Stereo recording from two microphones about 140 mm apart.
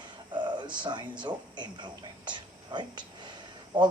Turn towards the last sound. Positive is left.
turn(degrees=-30)  # may be behind; listen again after turning